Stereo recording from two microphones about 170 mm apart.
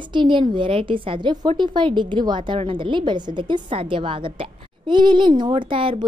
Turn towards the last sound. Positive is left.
turn(degrees=-30)  # may be behind; listen again after turning